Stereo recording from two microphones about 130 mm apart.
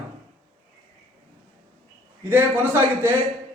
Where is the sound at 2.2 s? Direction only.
15° right (ahead or behind).